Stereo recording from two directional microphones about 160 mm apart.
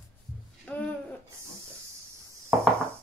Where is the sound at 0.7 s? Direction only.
10° left (ahead or behind).